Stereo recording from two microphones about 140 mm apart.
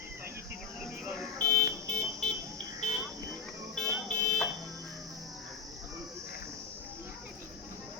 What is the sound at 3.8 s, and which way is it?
Buzzer, 5° left (ahead or behind).